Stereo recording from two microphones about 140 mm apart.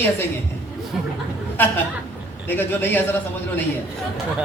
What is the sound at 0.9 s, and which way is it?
Speech, centre (ahead or behind).